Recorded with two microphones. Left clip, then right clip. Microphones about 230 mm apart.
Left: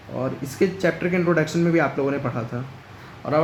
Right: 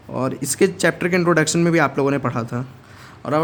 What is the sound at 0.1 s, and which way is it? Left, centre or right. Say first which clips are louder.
Speech: right 4 dB; right.